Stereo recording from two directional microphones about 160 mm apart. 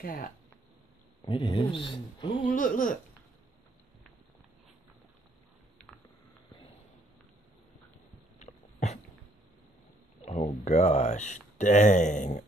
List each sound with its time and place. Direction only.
0.0 s speech: 65° left (ahead or behind)
1.2 s speech: 30° left (ahead or behind)
2.4 s speech: 55° left (ahead or behind)
8.4 s dog: 45° left (ahead or behind)
10.2 s speech: 50° left (ahead or behind)